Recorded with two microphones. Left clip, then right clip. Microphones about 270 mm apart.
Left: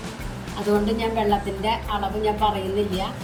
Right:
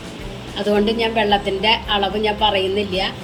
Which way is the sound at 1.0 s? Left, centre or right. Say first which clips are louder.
Right 5 dB; left.